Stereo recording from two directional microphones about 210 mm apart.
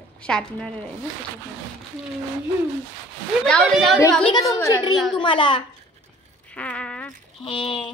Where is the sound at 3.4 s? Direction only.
5° left (ahead or behind).